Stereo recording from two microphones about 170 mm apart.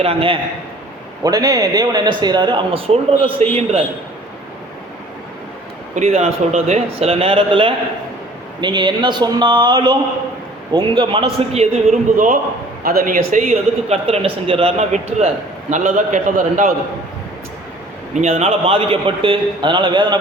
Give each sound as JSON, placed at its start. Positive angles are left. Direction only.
{"t": 0.0, "sound": "a man's voice", "side_deg": -35}
{"t": 1.2, "sound": "speech", "side_deg": -20}
{"t": 5.9, "sound": "a man's voice", "side_deg": -40}
{"t": 12.1, "sound": "a man's voice", "side_deg": -50}
{"t": 18.1, "sound": "a man's voice", "side_deg": -40}